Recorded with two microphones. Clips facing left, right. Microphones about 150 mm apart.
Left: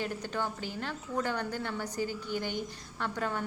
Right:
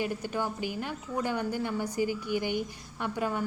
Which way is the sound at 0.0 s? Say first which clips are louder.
Right 3 dB; 10° right (ahead or behind).